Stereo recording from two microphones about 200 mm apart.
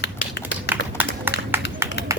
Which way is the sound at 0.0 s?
60° left (ahead or behind).